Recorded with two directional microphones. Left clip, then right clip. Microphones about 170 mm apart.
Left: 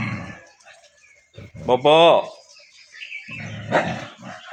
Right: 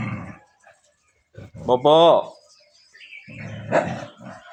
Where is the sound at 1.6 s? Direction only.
20° right (ahead or behind).